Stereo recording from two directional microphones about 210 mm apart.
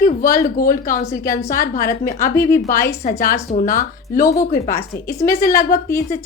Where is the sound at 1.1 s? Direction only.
15° left (ahead or behind).